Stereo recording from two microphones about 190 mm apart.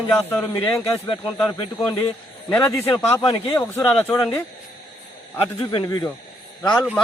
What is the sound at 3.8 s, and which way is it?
Speech, 5° left (ahead or behind).